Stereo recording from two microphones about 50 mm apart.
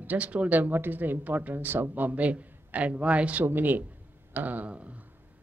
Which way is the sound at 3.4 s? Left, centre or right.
Right.